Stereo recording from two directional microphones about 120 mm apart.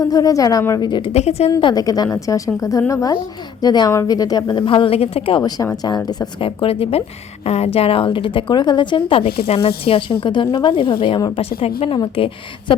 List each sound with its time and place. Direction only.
0.0 s a woman's voice: 30° left (ahead or behind)
1.1 s speech: 60° left (ahead or behind)
1.6 s a woman's voice: 30° left (ahead or behind); by 5.4 s 55° left (ahead or behind)
5.4 s a woman's voice: 30° left (ahead or behind)
6.4 s a woman's voice: 50° left (ahead or behind)
11.3 s a woman's voice: 55° left (ahead or behind)